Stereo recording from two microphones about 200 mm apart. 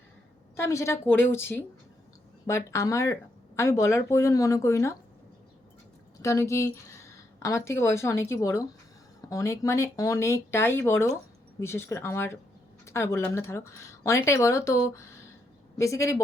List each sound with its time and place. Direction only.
0.5 s speech: 15° left (ahead or behind)
6.2 s speech: 15° left (ahead or behind)